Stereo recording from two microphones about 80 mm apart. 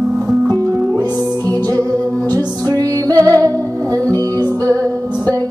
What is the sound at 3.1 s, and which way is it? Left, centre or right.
Music, right.